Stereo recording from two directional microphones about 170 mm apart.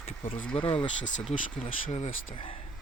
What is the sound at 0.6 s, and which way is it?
Speech, 35° left (ahead or behind).